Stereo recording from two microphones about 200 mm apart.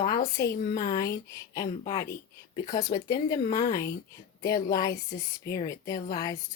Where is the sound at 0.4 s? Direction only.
15° left (ahead or behind).